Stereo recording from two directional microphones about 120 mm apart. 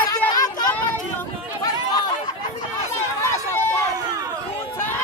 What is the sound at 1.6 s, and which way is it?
Chatter, 35° left (ahead or behind).